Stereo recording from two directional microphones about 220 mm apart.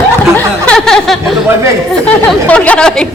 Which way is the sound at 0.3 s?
5° left (ahead or behind).